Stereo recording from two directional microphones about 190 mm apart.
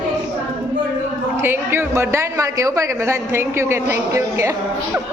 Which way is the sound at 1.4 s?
10° right (ahead or behind).